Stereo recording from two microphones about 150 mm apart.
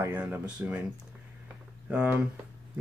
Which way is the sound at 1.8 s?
5° right (ahead or behind).